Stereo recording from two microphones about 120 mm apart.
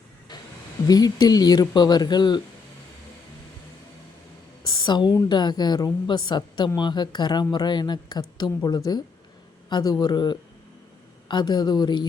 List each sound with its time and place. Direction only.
0.9 s speech: 30° left (ahead or behind)
4.6 s a sound: 35° left (ahead or behind)
5.1 s speech: 35° left (ahead or behind)